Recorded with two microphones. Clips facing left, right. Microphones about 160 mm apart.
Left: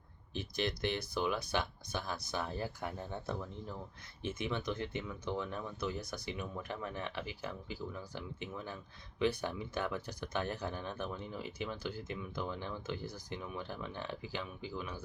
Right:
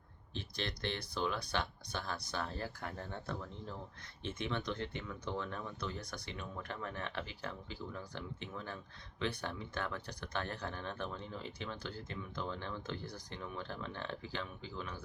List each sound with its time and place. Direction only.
0.3 s speech: 10° left (ahead or behind)